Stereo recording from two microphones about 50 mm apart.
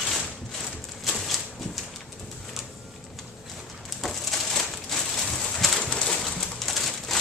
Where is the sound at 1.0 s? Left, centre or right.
Centre.